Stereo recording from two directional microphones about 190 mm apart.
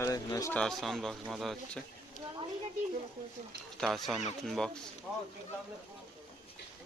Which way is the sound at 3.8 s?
Centre (ahead or behind).